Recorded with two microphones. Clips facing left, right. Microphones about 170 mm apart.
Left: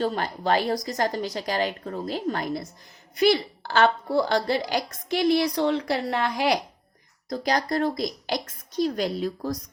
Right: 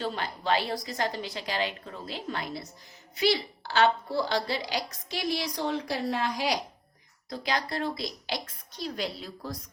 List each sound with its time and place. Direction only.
0.0 s a woman's voice: 45° left (ahead or behind); by 6.6 s 60° left (ahead or behind)
7.3 s a woman's voice: 40° left (ahead or behind)